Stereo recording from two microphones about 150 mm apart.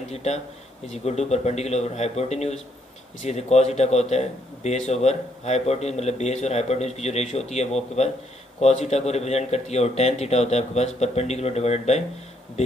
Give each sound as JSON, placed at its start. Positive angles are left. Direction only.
{"t": 0.1, "sound": "a man's voice", "side_deg": 45}